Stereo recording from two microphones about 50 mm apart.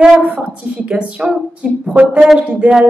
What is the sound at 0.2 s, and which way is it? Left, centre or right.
A woman's voice, right.